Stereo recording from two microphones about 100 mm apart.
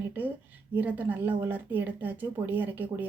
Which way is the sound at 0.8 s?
20° right (ahead or behind).